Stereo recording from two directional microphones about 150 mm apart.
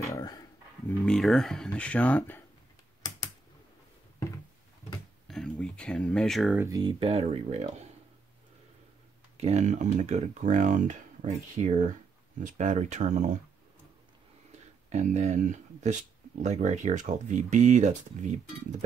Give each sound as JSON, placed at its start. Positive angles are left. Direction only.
{"t": 0.0, "sound": "dog", "side_deg": 25}
{"t": 0.9, "sound": "speech", "side_deg": 0}
{"t": 5.3, "sound": "speech", "side_deg": 5}
{"t": 6.6, "sound": "speech", "side_deg": -25}
{"t": 9.4, "sound": "speech", "side_deg": -50}
{"t": 11.6, "sound": "speech", "side_deg": -40}
{"t": 12.4, "sound": "speech", "side_deg": -55}
{"t": 14.5, "sound": "speech", "side_deg": -50}